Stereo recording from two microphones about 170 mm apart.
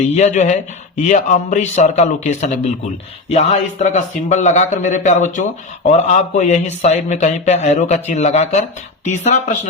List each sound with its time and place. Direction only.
0.1 s speech: 45° left (ahead or behind)